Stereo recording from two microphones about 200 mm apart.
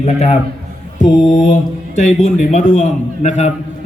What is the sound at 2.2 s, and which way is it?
A man's voice, 35° left (ahead or behind).